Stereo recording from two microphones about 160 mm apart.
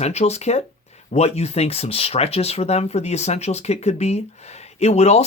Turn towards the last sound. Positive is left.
turn(degrees=40)  # may be behind; listen again after turning